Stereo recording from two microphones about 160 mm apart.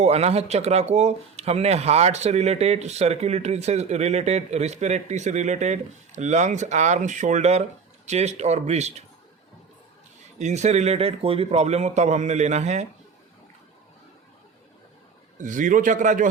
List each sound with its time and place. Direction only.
0.0 s speech: 40° right (ahead or behind)
10.3 s speech: 45° right (ahead or behind)
15.4 s a man's voice: 55° right (ahead or behind)